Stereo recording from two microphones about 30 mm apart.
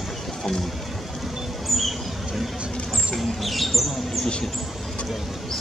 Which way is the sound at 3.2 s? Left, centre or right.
Centre.